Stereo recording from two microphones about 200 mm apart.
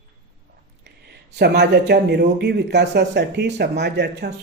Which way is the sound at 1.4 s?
55° right (ahead or behind).